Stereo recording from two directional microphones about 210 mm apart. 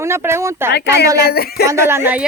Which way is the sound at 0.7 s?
50° left (ahead or behind).